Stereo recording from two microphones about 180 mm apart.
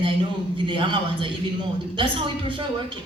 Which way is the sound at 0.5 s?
30° right (ahead or behind).